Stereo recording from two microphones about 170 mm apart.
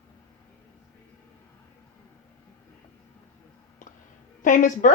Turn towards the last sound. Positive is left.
turn(degrees=50)  # may be behind; listen again after turning